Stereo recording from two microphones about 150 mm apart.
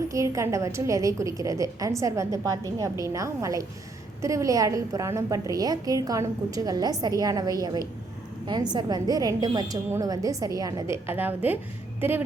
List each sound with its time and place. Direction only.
0.1 s a woman's voice: 20° right (ahead or behind)